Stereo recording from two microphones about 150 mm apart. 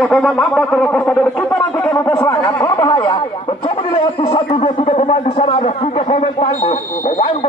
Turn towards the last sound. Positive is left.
turn(degrees=60)  # may be behind; listen again after turning